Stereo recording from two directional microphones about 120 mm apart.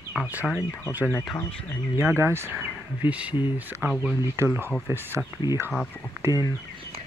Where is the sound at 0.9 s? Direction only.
15° right (ahead or behind).